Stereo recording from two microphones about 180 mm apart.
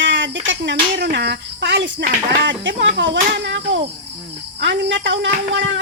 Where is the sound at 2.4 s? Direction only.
90° right.